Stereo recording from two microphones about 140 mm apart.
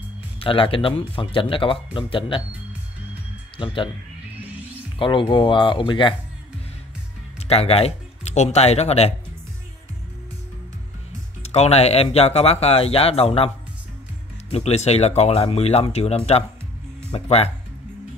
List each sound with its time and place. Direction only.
0.4 s speech: 40° left (ahead or behind)
3.5 s speech: 35° left (ahead or behind)
4.9 s speech: 35° left (ahead or behind)
7.3 s speech: 45° left (ahead or behind)
11.4 s speech: 50° left (ahead or behind)
14.5 s speech: 50° left (ahead or behind)